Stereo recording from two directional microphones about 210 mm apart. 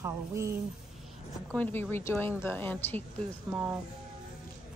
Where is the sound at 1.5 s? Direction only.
10° left (ahead or behind).